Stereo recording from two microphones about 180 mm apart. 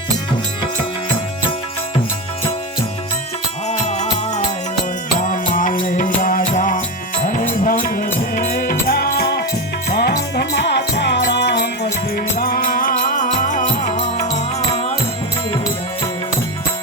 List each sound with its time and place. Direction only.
3.7 s music: 40° left (ahead or behind)
5.2 s music: 45° left (ahead or behind)
14.3 s music: 35° left (ahead or behind)